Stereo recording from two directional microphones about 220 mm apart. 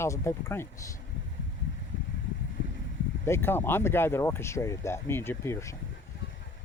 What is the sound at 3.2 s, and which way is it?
Speech, 10° left (ahead or behind).